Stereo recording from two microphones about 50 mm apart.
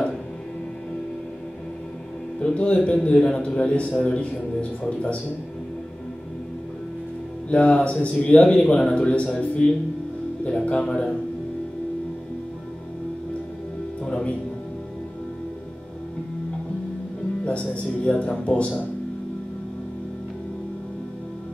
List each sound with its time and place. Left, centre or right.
2.4 s speech: left
7.4 s speech: left
14.0 s music: left
17.5 s speech: left